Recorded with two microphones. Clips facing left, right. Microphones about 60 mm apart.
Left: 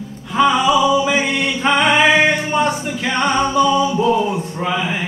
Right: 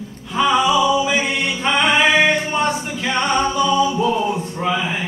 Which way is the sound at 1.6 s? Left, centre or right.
Centre.